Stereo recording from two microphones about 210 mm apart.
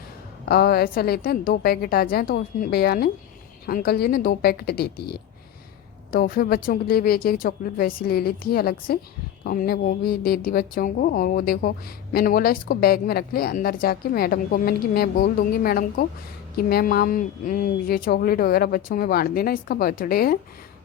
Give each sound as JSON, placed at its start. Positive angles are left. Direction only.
{"t": 0.4, "sound": "a woman's voice", "side_deg": 50}